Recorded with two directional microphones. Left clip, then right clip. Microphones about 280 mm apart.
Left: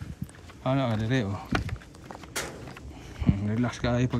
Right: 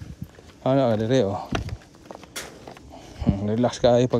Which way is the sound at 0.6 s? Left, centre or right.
Right.